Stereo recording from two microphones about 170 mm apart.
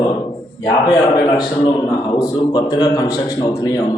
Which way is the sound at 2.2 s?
25° left (ahead or behind).